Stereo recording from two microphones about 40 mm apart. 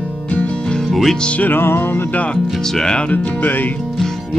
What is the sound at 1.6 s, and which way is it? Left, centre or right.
Music, left.